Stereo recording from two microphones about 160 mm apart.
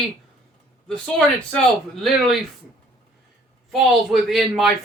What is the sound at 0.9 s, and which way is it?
Speech, 5° left (ahead or behind).